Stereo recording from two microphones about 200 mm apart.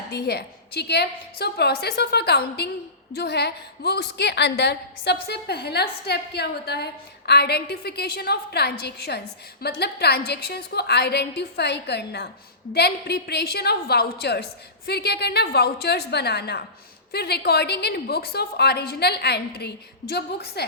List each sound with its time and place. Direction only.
0.1 s a woman's voice: 55° left (ahead or behind)